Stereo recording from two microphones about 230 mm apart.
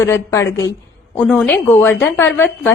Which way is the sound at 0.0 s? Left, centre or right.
Centre.